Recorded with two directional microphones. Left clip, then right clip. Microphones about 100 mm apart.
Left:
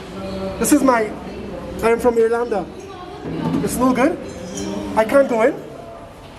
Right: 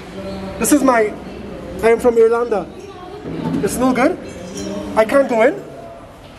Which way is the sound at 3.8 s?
10° right (ahead or behind).